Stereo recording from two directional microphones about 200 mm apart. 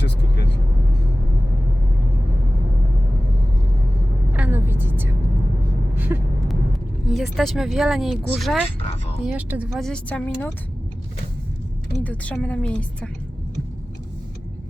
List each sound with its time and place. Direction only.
0.0 s vehicle: 60° left (ahead or behind)
4.3 s vehicle: 10° right (ahead or behind)
7.1 s speech: centre (ahead or behind)
12.0 s a woman's voice: 5° left (ahead or behind)